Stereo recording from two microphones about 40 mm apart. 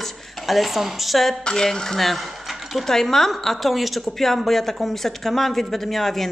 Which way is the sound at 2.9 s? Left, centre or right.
Centre.